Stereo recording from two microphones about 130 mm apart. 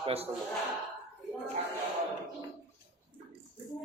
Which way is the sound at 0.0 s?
50° right (ahead or behind).